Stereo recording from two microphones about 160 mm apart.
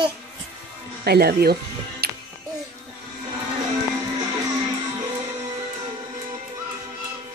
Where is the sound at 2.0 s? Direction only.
85° right.